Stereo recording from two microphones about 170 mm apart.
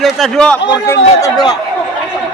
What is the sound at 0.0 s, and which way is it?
Speech, centre (ahead or behind).